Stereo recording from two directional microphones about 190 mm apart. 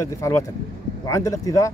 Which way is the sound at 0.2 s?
15° left (ahead or behind).